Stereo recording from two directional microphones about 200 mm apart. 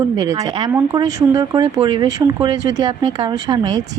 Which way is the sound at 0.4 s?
25° right (ahead or behind).